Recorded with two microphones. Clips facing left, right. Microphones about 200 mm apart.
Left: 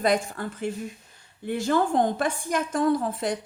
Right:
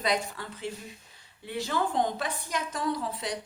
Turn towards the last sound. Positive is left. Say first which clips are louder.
# left 7 dB
turn(degrees=50)  # may be behind; listen again after turning